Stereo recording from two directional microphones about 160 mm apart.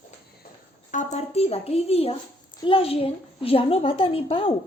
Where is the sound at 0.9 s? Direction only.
45° left (ahead or behind).